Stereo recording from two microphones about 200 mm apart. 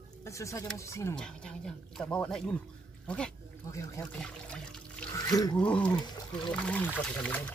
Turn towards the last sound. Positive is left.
turn(degrees=10)  # may be behind; listen again after turning